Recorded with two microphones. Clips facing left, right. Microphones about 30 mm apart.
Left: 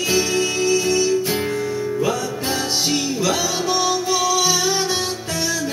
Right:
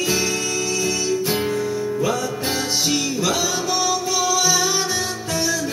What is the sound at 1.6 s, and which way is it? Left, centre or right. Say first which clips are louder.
Music: even; left.